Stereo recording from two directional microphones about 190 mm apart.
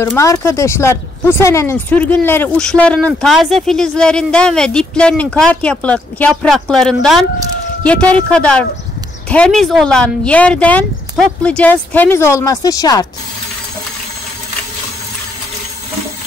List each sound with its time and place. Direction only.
0.0 s speech: 15° left (ahead or behind)